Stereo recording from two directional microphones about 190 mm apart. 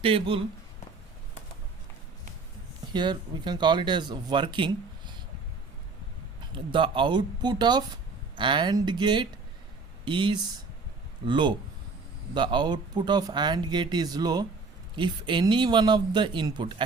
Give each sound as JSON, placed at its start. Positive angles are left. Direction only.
{"t": 0.0, "sound": "speech", "side_deg": -30}
{"t": 2.9, "sound": "speech", "side_deg": -25}
{"t": 6.5, "sound": "speech", "side_deg": -25}